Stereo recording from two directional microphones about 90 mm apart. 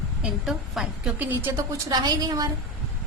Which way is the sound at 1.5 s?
35° right (ahead or behind).